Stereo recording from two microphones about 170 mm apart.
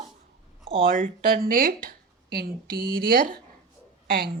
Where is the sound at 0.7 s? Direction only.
30° right (ahead or behind).